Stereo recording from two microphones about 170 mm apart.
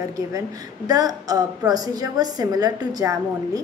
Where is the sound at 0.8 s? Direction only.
20° right (ahead or behind).